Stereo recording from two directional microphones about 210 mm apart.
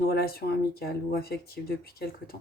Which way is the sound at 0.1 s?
45° left (ahead or behind).